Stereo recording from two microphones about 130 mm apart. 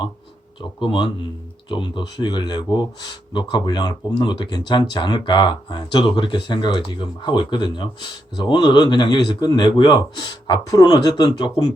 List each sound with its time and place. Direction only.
0.6 s speech: 40° left (ahead or behind)